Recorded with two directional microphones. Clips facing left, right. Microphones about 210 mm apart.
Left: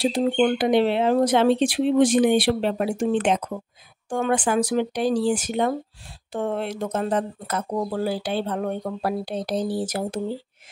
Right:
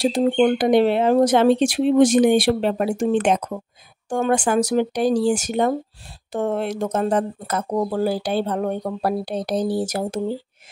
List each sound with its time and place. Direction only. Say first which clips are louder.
0.0 s speech: right 3 dB; 45° right (ahead or behind)